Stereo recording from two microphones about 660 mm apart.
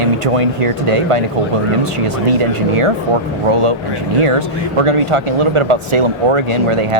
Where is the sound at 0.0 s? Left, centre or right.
Right.